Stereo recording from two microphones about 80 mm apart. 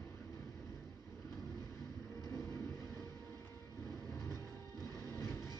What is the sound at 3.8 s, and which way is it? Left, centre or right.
Vehicle, right.